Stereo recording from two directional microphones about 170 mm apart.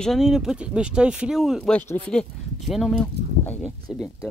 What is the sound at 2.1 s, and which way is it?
Speech, centre (ahead or behind).